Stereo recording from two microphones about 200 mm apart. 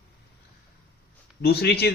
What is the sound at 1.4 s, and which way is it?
Speech, 55° left (ahead or behind).